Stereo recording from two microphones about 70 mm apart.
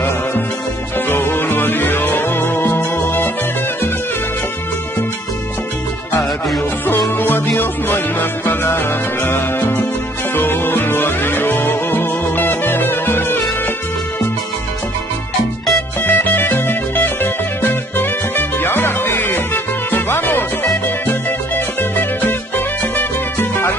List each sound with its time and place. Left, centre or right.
0.9 s music: left
7.2 s music: left
16.0 s music: left